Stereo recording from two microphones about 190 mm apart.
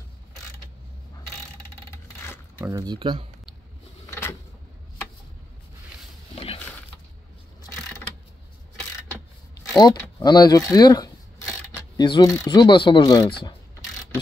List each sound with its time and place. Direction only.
2.6 s speech: 20° right (ahead or behind)
4.1 s vehicle: 15° left (ahead or behind)
6.3 s a sound: 30° left (ahead or behind)
9.8 s speech: 20° left (ahead or behind)